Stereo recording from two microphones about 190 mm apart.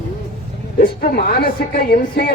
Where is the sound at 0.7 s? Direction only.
50° left (ahead or behind).